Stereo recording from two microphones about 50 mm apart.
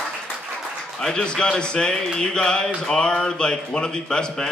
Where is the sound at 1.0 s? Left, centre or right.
Centre.